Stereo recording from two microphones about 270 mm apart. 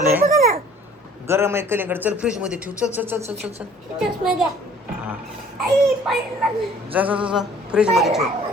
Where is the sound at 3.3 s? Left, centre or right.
Right.